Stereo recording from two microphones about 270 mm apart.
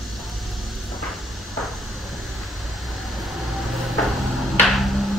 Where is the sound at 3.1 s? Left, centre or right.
Centre.